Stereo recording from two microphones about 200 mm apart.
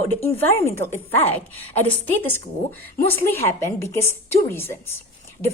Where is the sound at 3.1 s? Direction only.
10° left (ahead or behind).